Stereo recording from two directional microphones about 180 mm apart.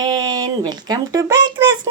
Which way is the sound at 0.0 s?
20° right (ahead or behind).